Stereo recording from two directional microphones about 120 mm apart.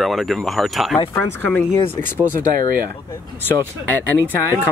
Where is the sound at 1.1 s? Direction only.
15° left (ahead or behind).